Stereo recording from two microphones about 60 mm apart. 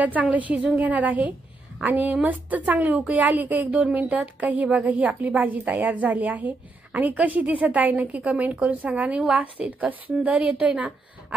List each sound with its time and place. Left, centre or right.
0.0 s a woman's voice: right